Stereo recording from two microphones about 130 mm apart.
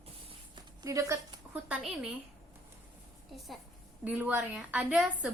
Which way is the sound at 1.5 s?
10° right (ahead or behind).